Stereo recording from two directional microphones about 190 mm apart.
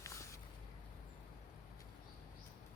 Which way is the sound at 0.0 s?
15° left (ahead or behind).